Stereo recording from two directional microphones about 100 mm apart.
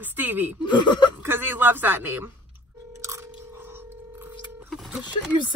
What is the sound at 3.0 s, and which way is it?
Biting, 30° right (ahead or behind).